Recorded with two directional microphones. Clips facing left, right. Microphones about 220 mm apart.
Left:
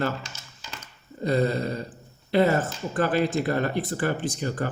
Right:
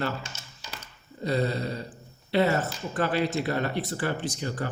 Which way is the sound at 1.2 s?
50° left (ahead or behind).